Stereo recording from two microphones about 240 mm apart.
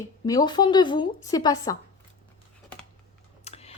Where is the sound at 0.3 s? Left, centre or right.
Centre.